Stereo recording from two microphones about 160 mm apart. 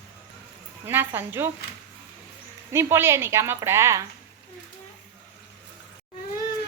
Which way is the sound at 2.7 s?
15° right (ahead or behind).